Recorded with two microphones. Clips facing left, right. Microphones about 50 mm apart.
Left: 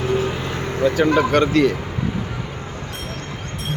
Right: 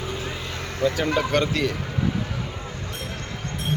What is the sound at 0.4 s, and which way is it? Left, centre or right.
Vehicle, left.